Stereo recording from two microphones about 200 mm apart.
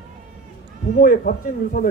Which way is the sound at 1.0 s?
45° left (ahead or behind).